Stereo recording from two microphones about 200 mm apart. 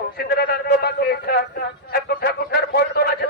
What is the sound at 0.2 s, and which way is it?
A man's voice, 50° left (ahead or behind).